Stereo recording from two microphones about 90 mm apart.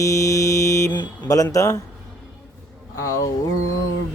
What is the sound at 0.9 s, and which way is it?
Speech, 40° left (ahead or behind).